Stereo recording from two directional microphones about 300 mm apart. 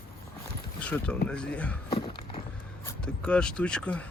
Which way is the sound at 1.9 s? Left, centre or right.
Centre.